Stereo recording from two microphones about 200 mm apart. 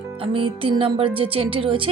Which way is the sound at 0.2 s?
25° right (ahead or behind).